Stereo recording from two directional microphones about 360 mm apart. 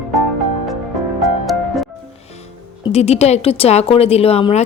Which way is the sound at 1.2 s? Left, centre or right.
Centre.